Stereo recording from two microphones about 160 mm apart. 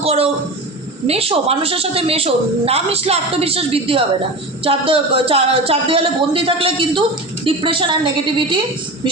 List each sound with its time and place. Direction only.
0.0 s a woman's voice: 40° right (ahead or behind)